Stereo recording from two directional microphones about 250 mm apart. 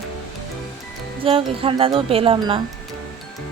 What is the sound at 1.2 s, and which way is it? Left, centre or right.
Wind chime, right.